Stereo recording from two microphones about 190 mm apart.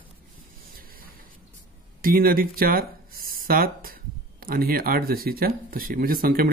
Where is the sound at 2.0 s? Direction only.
50° right (ahead or behind).